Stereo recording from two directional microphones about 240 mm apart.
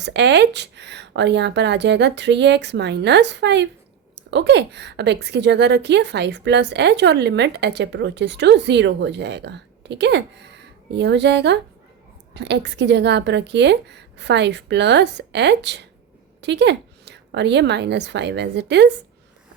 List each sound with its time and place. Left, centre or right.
0.0 s a woman's voice: right